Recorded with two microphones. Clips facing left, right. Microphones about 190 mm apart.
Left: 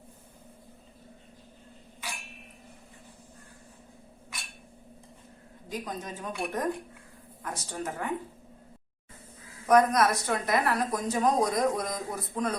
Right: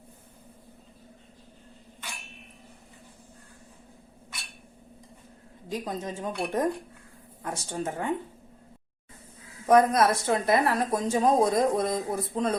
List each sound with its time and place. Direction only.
5.6 s speech: 25° right (ahead or behind)
9.6 s speech: 25° right (ahead or behind)